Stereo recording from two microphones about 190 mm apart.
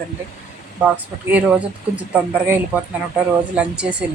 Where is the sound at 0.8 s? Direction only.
10° right (ahead or behind).